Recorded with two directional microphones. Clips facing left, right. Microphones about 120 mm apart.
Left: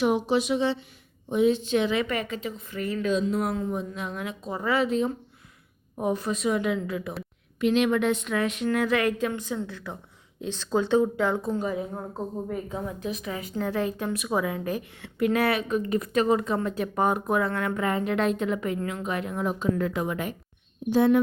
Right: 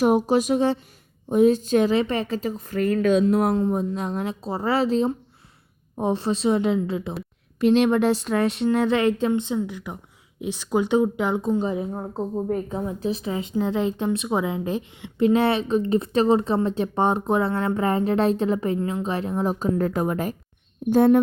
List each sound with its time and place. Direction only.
0.0 s a woman's voice: 45° right (ahead or behind)
3.5 s a woman's voice: 35° right (ahead or behind)